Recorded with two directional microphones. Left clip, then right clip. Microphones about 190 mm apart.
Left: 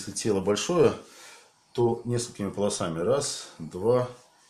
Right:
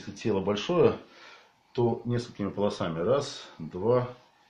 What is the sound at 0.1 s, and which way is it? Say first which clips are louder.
Speech: left 3 dB; 25° left (ahead or behind).